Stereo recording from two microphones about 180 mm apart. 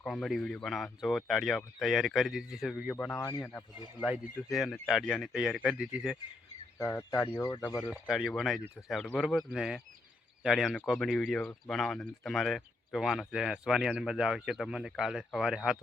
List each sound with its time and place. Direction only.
0.0 s speech: centre (ahead or behind)
4.5 s speech: centre (ahead or behind)
6.7 s speech: 15° left (ahead or behind)
7.9 s speech: 5° right (ahead or behind)